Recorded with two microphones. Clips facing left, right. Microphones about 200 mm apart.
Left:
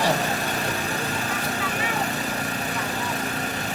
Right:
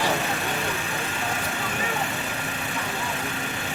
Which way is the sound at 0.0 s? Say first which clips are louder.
Left 2 dB; 40° left (ahead or behind).